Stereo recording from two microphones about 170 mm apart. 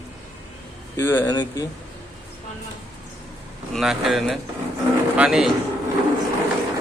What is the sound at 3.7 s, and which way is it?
Speech, centre (ahead or behind).